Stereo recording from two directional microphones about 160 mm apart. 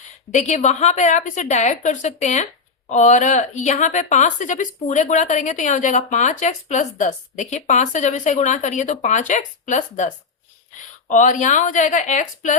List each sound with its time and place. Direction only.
0.0 s a woman's voice: 45° left (ahead or behind)
11.1 s a woman's voice: 50° left (ahead or behind)